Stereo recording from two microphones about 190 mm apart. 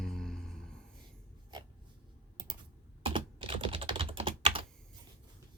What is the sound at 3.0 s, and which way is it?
Computer keyboard, 25° right (ahead or behind).